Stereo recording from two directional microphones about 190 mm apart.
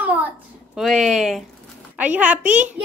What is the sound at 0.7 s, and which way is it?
A woman's voice, centre (ahead or behind).